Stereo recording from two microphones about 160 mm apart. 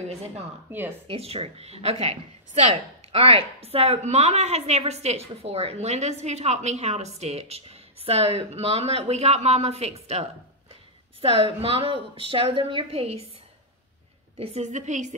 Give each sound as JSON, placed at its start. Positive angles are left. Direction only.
{"t": 0.7, "sound": "speech", "side_deg": -10}
{"t": 1.0, "sound": "speech", "side_deg": -40}
{"t": 14.4, "sound": "a woman's voice", "side_deg": -45}